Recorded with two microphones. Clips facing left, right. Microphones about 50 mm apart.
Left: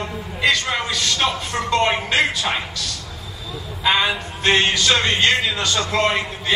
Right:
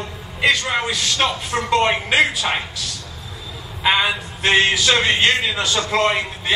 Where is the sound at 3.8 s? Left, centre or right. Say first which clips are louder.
Right 1 dB; centre.